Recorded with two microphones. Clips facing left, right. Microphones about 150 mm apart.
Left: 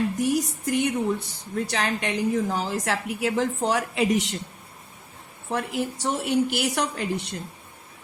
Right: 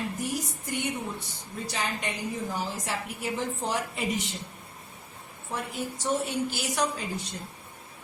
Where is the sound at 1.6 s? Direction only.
90° left.